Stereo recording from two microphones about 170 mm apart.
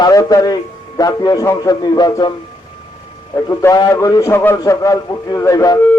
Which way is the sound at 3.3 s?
20° left (ahead or behind).